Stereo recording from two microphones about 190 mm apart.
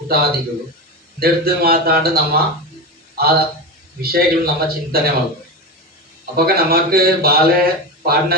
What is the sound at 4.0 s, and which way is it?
Speech, 55° right (ahead or behind).